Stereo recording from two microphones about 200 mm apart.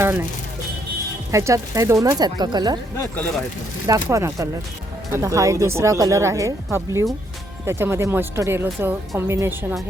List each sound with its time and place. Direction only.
0.0 s speech: 10° right (ahead or behind)
1.3 s speech: 15° right (ahead or behind)
3.8 s speech: 15° right (ahead or behind)